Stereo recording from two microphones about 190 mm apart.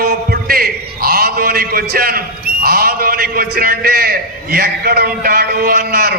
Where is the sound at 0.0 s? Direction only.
55° right (ahead or behind).